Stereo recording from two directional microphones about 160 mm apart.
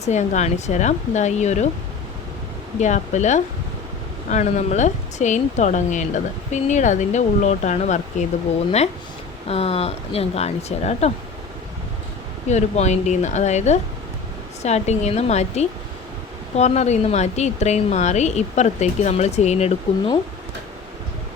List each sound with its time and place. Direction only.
0.0 s speech: 45° left (ahead or behind)
2.8 s speech: 50° left (ahead or behind)
9.5 s speech: 40° left (ahead or behind)
12.5 s speech: 45° left (ahead or behind)